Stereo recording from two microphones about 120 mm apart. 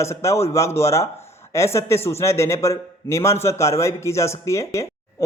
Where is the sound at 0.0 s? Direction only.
25° left (ahead or behind).